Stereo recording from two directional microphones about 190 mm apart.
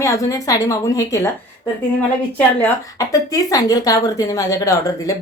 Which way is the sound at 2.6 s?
15° left (ahead or behind).